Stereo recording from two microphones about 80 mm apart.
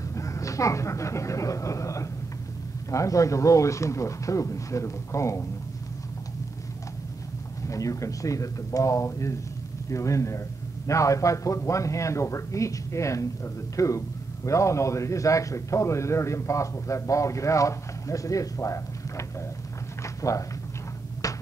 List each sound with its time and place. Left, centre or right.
0.1 s speech: left
7.6 s speech: left
20.0 s a sound: left
21.2 s music: left